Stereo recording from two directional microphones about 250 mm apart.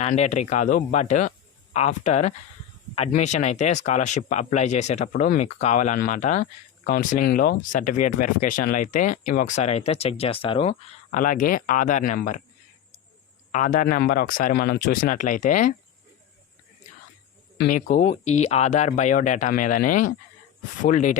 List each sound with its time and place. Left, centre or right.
0.0 s speech: left
13.5 s speech: left
17.6 s speech: left